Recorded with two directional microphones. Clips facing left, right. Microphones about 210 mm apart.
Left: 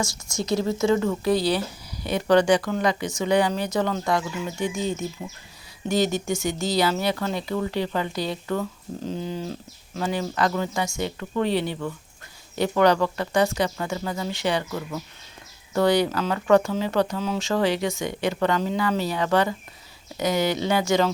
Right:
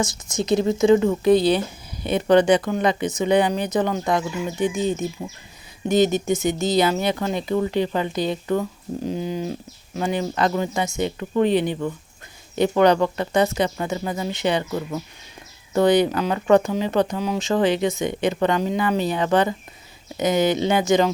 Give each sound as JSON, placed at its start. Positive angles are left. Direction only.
{"t": 0.0, "sound": "speech", "side_deg": -20}